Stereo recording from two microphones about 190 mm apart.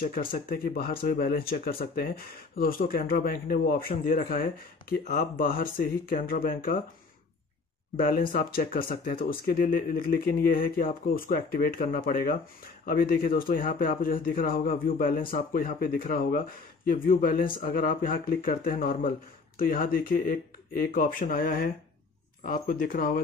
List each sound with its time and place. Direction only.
0.0 s speech: 50° left (ahead or behind)
7.9 s speech: 50° left (ahead or behind)